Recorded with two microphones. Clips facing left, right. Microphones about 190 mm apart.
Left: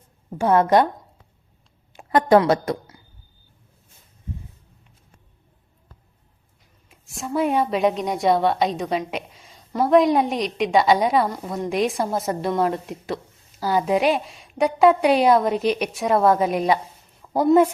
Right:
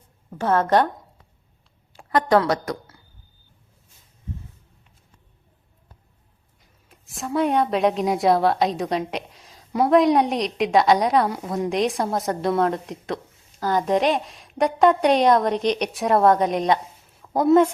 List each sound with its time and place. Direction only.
0.3 s a woman's voice: 15° left (ahead or behind)
1.9 s a woman's voice: 20° left (ahead or behind)
6.8 s a woman's voice: centre (ahead or behind)